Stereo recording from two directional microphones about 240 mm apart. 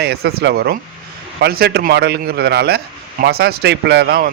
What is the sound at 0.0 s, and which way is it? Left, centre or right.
A man's voice, right.